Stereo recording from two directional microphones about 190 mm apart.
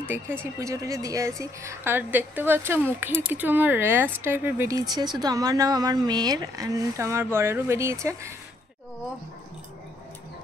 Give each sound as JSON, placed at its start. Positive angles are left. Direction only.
{"t": 0.0, "sound": "a woman's voice", "side_deg": -10}